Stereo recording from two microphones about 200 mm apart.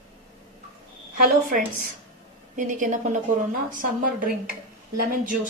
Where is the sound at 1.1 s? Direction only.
45° right (ahead or behind).